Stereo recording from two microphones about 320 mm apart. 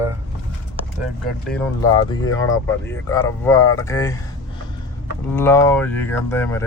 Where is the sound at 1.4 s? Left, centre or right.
Centre.